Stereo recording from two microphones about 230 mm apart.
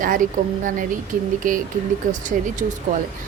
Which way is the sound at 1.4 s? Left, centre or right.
Right.